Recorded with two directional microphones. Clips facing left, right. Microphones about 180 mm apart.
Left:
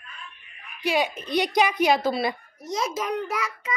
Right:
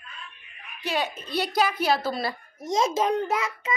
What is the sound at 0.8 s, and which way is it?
Speech, 10° left (ahead or behind).